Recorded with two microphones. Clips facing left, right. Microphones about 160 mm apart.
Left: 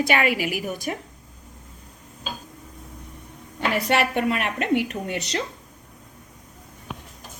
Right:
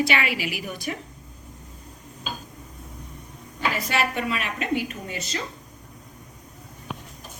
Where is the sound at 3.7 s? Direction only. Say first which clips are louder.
Left 6 dB; 65° left (ahead or behind).